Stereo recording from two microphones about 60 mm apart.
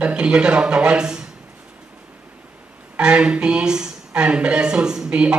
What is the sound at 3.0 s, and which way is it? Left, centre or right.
A woman's voice, centre.